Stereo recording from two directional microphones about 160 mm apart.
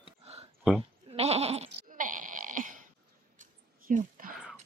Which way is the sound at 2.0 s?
55° right (ahead or behind).